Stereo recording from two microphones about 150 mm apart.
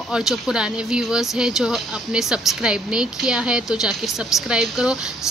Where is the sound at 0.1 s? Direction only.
5° right (ahead or behind).